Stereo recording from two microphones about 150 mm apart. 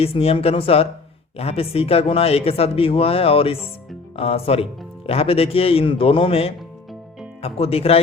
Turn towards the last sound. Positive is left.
turn(degrees=40)  # may be behind; listen again after turning